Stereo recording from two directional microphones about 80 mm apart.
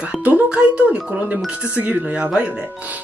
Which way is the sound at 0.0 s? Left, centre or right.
Centre.